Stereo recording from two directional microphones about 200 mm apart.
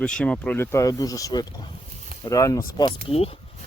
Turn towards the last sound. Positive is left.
turn(degrees=30)  # may be behind; listen again after turning